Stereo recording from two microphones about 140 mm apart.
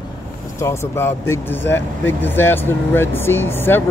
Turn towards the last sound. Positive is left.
turn(degrees=15)  # may be behind; listen again after turning